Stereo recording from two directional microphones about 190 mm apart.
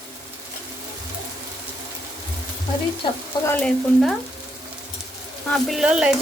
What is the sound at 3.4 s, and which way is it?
Frying, 10° left (ahead or behind).